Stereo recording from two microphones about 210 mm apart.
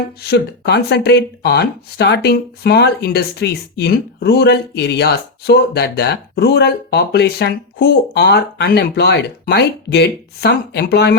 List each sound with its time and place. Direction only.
0.2 s speech: 50° left (ahead or behind)